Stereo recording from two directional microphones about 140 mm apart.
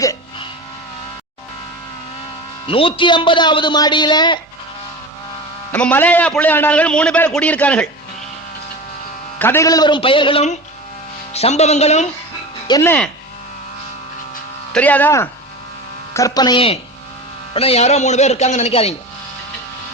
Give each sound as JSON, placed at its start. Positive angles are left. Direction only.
{"t": 2.6, "sound": "a man's voice", "side_deg": 40}
{"t": 5.7, "sound": "a man's voice", "side_deg": 10}
{"t": 9.4, "sound": "a man's voice", "side_deg": 15}
{"t": 9.6, "sound": "a man's voice", "side_deg": 30}
{"t": 11.3, "sound": "speech", "side_deg": 50}
{"t": 12.8, "sound": "a man's voice", "side_deg": 15}
{"t": 14.7, "sound": "a man's voice", "side_deg": 10}
{"t": 16.1, "sound": "speech", "side_deg": 25}